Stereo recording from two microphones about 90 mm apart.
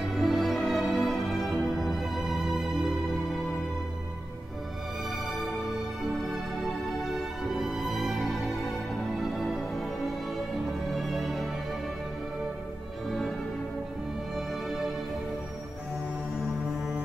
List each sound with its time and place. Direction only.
0.2 s music: centre (ahead or behind)
7.5 s music: 5° right (ahead or behind)
10.9 s music: centre (ahead or behind)
14.3 s music: 5° right (ahead or behind)